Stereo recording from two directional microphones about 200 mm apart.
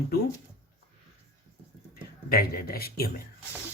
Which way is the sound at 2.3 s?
50° left (ahead or behind).